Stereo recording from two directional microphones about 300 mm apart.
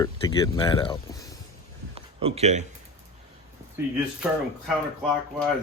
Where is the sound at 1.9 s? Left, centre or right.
Centre.